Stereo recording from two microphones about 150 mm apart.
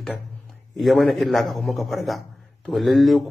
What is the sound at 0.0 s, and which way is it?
A man's voice, centre (ahead or behind).